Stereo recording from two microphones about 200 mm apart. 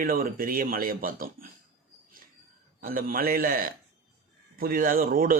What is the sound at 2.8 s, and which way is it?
Speech, 45° right (ahead or behind).